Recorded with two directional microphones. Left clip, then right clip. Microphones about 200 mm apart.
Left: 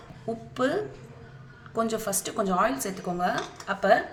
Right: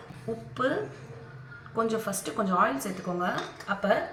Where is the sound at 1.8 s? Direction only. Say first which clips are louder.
Left 1 dB; 45° left (ahead or behind).